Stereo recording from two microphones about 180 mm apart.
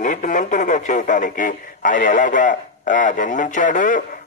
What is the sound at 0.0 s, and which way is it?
Speech, 45° left (ahead or behind).